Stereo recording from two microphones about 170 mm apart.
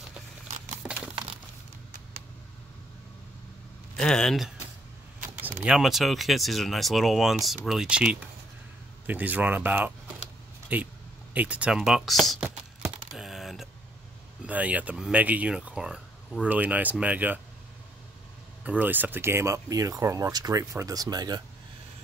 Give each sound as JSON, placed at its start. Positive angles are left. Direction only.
{"t": 3.9, "sound": "speech", "side_deg": 5}
{"t": 13.1, "sound": "typing", "side_deg": 0}
{"t": 14.4, "sound": "speech", "side_deg": -10}
{"t": 18.6, "sound": "speech", "side_deg": -10}